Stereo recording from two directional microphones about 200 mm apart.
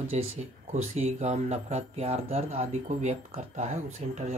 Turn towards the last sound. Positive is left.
turn(degrees=-35)  # may be behind; listen again after turning